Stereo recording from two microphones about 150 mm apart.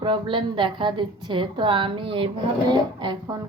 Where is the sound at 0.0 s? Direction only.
35° right (ahead or behind).